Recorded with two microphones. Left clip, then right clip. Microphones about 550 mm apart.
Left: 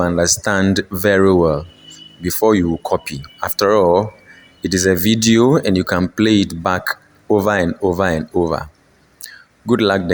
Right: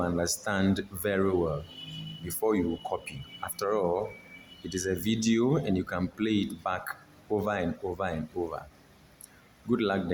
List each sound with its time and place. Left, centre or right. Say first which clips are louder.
0.0 s speech: left 14 dB; centre
9.6 s a man's voice: left 14 dB; centre